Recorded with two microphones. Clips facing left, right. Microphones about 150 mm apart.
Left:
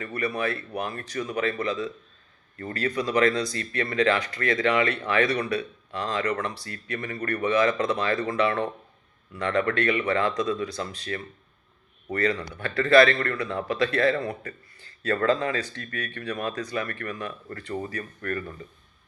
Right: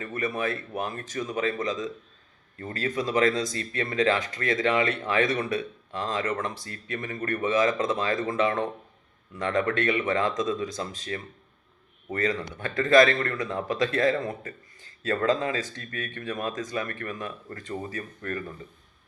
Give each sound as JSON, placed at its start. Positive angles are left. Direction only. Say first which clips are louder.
{"t": 0.0, "sound": "speech", "louder": "left 1 dB", "side_deg": -20}
{"t": 12.3, "sound": "speech", "louder": "left 1 dB", "side_deg": -20}